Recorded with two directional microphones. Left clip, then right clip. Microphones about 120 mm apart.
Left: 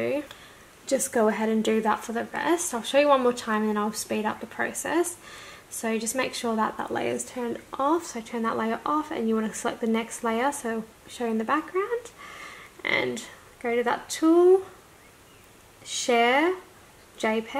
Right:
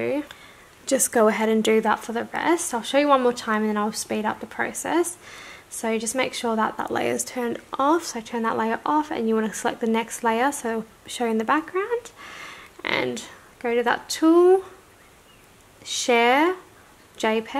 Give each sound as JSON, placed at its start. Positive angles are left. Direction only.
{"t": 0.8, "sound": "a woman's voice", "side_deg": -70}
{"t": 1.1, "sound": "speech", "side_deg": -45}
{"t": 8.3, "sound": "speech", "side_deg": -40}
{"t": 11.4, "sound": "speech", "side_deg": -40}
{"t": 13.6, "sound": "speech", "side_deg": -45}
{"t": 16.1, "sound": "speech", "side_deg": -55}